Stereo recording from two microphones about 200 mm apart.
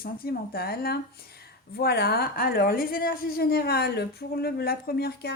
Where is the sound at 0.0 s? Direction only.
50° left (ahead or behind).